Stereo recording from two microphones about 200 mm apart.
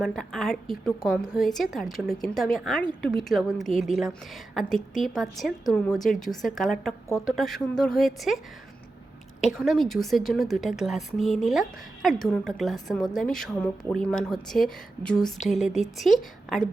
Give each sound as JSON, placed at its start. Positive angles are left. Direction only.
{"t": 0.0, "sound": "a woman's voice", "side_deg": 0}
{"t": 9.6, "sound": "a woman's voice", "side_deg": 0}